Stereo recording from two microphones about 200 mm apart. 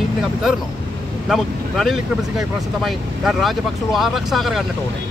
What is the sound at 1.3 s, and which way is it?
Speech, centre (ahead or behind).